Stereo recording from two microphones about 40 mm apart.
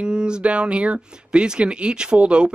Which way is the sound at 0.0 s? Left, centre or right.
Right.